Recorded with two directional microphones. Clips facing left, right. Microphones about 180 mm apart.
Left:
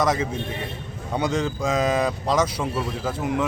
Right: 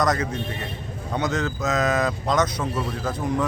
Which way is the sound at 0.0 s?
5° left (ahead or behind).